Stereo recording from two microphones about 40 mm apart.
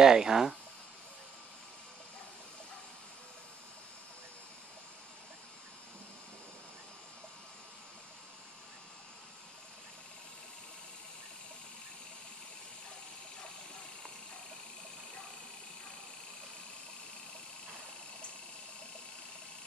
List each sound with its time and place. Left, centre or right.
0.0 s speech: centre